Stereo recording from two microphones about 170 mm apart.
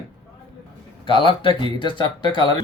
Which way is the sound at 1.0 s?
30° left (ahead or behind).